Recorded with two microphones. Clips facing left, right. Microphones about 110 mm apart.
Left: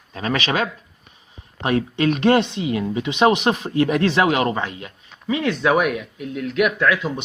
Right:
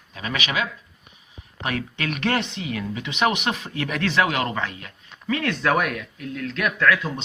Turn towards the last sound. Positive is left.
turn(degrees=20)  # may be behind; listen again after turning